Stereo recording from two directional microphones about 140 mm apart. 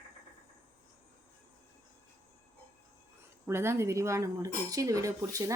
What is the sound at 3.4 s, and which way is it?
Speech, 20° right (ahead or behind).